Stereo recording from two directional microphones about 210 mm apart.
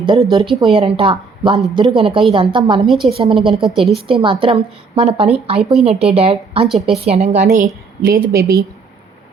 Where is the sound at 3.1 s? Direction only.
25° right (ahead or behind).